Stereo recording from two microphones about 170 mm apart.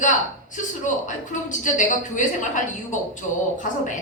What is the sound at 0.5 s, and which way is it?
A woman's voice, 45° left (ahead or behind).